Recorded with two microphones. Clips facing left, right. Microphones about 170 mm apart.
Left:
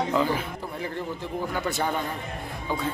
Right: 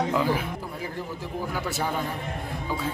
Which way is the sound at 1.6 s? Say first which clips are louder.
Left 3 dB; 5° right (ahead or behind).